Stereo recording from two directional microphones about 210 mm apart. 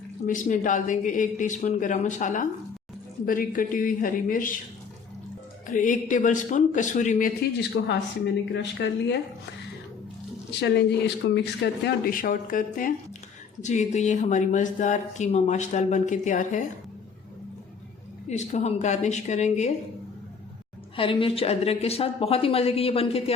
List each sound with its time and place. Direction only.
0.3 s speech: 40° left (ahead or behind)
5.6 s speech: 40° left (ahead or behind)
7.8 s speech: 65° left (ahead or behind)
10.6 s speech: 55° left (ahead or behind); by 16.6 s 35° left (ahead or behind)
18.3 s speech: 30° left (ahead or behind)
20.9 s speech: 25° left (ahead or behind)